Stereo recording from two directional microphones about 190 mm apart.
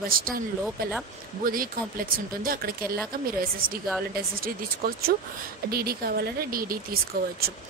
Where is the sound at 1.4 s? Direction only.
50° right (ahead or behind).